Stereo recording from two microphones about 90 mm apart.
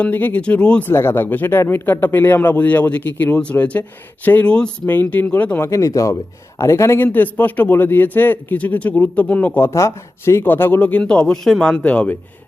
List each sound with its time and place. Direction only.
0.0 s speech: 20° left (ahead or behind)
5.6 s speech: 35° left (ahead or behind); by 9.5 s 15° left (ahead or behind)
9.6 s speech: 30° left (ahead or behind); by 12.1 s 15° left (ahead or behind)